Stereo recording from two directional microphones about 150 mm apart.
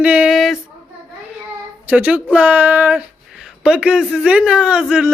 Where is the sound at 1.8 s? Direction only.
10° right (ahead or behind).